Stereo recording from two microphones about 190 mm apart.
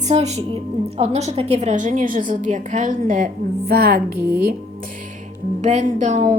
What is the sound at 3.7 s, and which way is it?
Speech, 55° right (ahead or behind).